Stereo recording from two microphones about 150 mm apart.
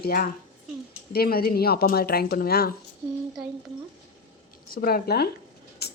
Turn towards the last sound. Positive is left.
turn(degrees=90)